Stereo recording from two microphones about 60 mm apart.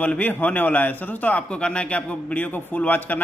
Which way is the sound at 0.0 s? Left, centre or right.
Left.